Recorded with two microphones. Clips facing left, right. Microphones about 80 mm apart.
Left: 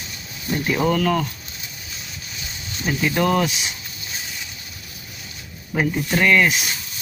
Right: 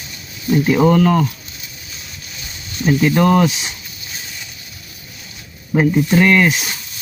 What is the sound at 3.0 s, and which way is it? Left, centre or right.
Speech, right.